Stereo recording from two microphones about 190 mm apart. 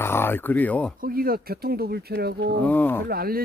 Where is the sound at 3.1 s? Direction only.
50° right (ahead or behind).